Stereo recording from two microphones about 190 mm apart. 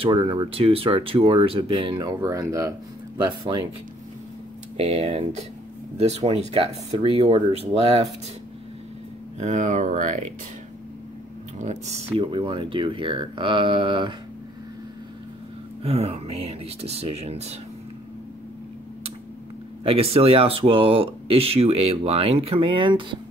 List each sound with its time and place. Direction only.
0.0 s speech: 25° right (ahead or behind)
4.7 s speech: 30° right (ahead or behind)
9.4 s speech: 40° right (ahead or behind)
11.5 s speech: 40° right (ahead or behind)
12.2 s speech: 25° right (ahead or behind)
15.8 s speech: 30° right (ahead or behind)
19.8 s speech: 30° right (ahead or behind)